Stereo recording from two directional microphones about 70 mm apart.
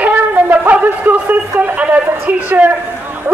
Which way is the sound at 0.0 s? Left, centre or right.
Right.